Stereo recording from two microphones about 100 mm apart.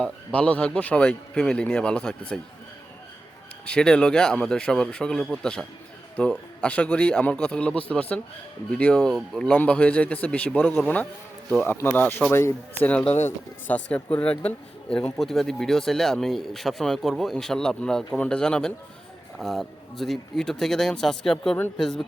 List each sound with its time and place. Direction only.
0.0 s a man's voice: 10° left (ahead or behind)
3.7 s a man's voice: 10° left (ahead or behind)